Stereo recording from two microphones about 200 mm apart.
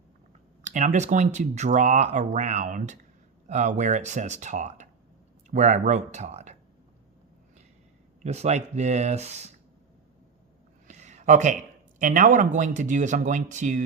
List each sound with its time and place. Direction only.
0.6 s speech: 40° right (ahead or behind)
8.2 s speech: 35° right (ahead or behind)
10.8 s a sound: 35° right (ahead or behind)
11.9 s speech: 40° right (ahead or behind)